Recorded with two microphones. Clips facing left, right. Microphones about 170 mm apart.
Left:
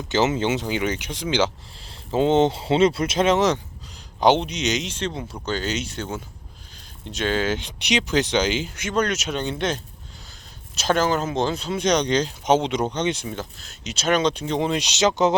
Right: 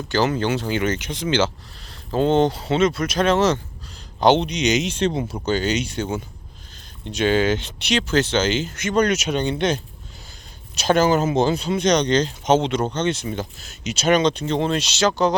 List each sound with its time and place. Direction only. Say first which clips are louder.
0.3 s speech: right 1 dB; 20° left (ahead or behind)
1.8 s speech: even; 25° left (ahead or behind); by 4.8 s centre (ahead or behind)
4.8 s speech: right 7 dB; 10° right (ahead or behind)
5.5 s speech: right 4 dB; centre (ahead or behind); by 13.2 s 15° left (ahead or behind)
13.7 s speech: right 4 dB; centre (ahead or behind); by 15.4 s 20° left (ahead or behind)